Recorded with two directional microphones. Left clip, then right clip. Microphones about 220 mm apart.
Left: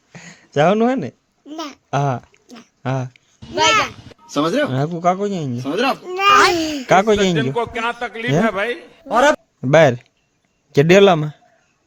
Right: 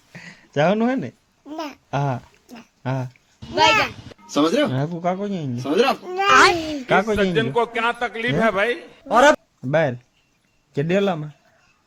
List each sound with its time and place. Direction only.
0.1 s a sound: 20° left (ahead or behind)
1.5 s babbling: centre (ahead or behind)
1.9 s speech: 25° left (ahead or behind)
3.4 s speech: centre (ahead or behind)
4.9 s speech: 30° left (ahead or behind)
5.5 s a man's voice: centre (ahead or behind)
6.7 s speech: 35° left (ahead or behind)
7.3 s a man's voice: centre (ahead or behind)
9.6 s a man's voice: 45° left (ahead or behind)